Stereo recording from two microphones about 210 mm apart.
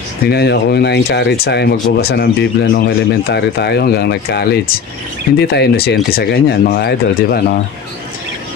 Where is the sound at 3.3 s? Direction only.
50° left (ahead or behind).